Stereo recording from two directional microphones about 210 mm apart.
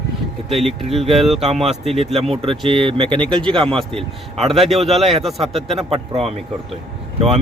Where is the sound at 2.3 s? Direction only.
25° right (ahead or behind).